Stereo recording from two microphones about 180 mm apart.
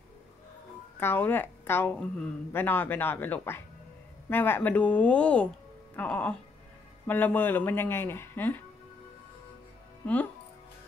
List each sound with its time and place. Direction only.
0.9 s a woman's voice: 10° left (ahead or behind)
10.0 s a woman's voice: 10° left (ahead or behind)